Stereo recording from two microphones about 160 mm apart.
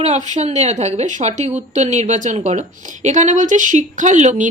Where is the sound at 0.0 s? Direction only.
45° right (ahead or behind).